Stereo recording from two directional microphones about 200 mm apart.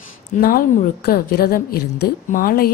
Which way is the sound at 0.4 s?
45° left (ahead or behind).